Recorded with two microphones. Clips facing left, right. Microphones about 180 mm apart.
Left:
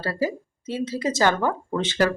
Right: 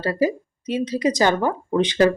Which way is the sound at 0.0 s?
15° right (ahead or behind).